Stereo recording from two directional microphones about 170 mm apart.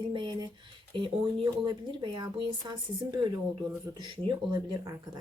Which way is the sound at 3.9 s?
30° right (ahead or behind).